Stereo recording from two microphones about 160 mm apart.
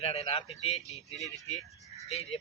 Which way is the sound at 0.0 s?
40° left (ahead or behind).